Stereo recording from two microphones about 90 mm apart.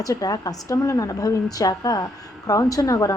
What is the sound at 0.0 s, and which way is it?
A woman's voice, 40° left (ahead or behind).